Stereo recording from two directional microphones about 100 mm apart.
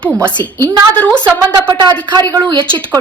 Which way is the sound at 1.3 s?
30° right (ahead or behind).